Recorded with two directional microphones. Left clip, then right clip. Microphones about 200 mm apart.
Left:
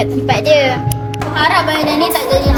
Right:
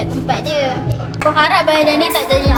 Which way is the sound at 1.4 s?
5° left (ahead or behind).